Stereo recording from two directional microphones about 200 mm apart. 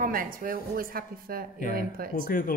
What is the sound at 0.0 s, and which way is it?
A woman's voice, 45° right (ahead or behind).